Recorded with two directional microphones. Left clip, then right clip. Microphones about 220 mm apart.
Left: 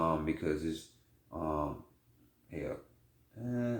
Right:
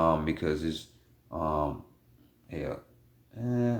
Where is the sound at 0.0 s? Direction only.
40° right (ahead or behind).